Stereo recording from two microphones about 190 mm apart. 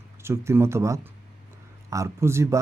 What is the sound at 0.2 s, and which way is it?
Speech, 15° right (ahead or behind).